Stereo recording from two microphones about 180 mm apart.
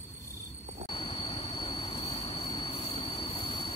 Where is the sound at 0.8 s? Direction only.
30° left (ahead or behind).